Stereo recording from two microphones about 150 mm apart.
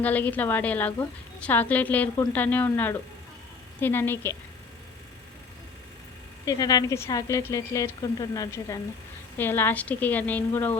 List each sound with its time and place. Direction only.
0.0 s a woman's voice: 10° left (ahead or behind)
6.4 s a woman's voice: 25° left (ahead or behind)